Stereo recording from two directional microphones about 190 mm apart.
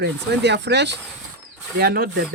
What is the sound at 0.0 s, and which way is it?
Speech, 65° right (ahead or behind).